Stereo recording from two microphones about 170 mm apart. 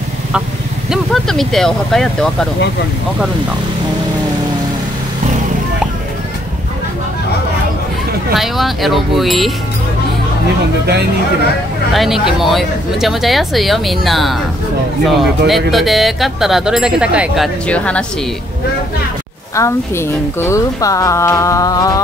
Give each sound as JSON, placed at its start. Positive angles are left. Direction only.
{"t": 0.8, "sound": "speech", "side_deg": 0}
{"t": 8.4, "sound": "speech", "side_deg": 0}
{"t": 11.9, "sound": "speech", "side_deg": 0}
{"t": 17.6, "sound": "a woman's voice", "side_deg": 5}
{"t": 19.5, "sound": "a woman's voice", "side_deg": 15}